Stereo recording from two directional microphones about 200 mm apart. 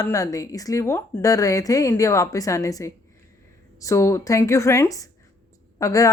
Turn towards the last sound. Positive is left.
turn(degrees=15)  # may be behind; listen again after turning